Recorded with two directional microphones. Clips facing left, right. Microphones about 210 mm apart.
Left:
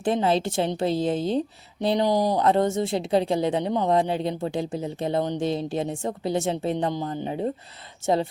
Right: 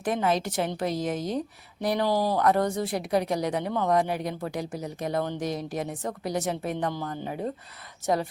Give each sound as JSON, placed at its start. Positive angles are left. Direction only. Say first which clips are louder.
{"t": 0.0, "sound": "speech", "louder": "left 3 dB", "side_deg": 30}